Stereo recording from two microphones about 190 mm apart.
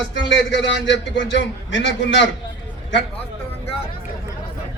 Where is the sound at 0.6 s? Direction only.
70° left (ahead or behind).